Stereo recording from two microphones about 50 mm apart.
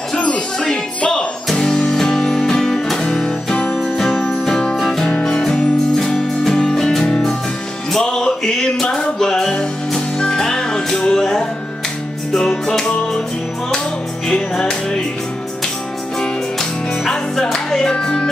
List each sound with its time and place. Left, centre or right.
0.1 s music: centre
3.7 s music: centre
14.2 s music: centre
17.0 s music: centre